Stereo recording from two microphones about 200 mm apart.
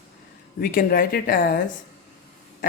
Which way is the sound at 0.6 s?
45° left (ahead or behind).